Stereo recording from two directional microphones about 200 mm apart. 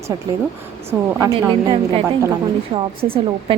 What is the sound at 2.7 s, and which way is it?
Speech, 30° right (ahead or behind).